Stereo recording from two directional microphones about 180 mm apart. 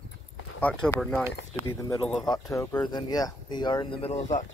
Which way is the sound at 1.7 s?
20° left (ahead or behind).